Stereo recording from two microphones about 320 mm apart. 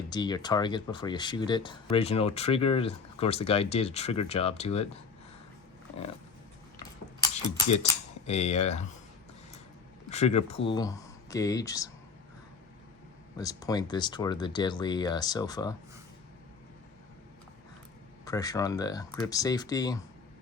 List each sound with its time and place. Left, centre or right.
0.1 s speech: centre
8.3 s speech: centre
10.1 s speech: left
13.3 s speech: centre
18.3 s speech: centre